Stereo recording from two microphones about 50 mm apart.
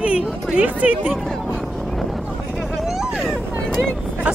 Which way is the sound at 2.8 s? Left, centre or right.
Centre.